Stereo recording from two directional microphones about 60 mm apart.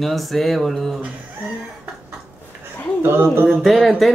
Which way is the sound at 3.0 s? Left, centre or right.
Right.